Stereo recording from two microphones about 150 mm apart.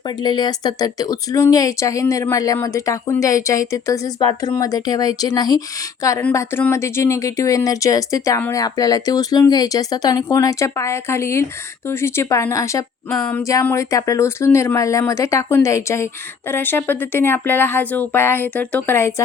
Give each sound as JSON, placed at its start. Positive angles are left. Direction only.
{"t": 0.2, "sound": "speech", "side_deg": 30}